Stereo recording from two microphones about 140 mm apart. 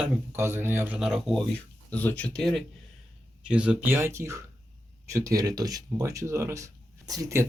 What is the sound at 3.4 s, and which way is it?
Speech, 10° right (ahead or behind).